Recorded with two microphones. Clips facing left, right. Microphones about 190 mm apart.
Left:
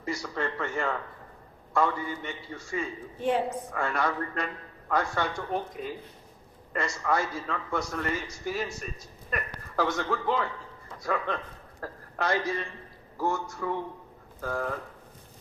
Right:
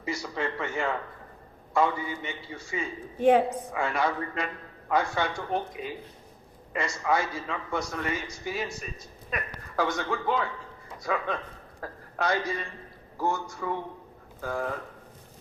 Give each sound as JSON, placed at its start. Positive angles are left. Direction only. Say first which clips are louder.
{"t": 0.0, "sound": "a man's voice", "louder": "even", "side_deg": -5}
{"t": 3.2, "sound": "a woman's voice", "louder": "right 7 dB", "side_deg": -60}
{"t": 3.7, "sound": "a man's voice", "louder": "right 1 dB", "side_deg": -5}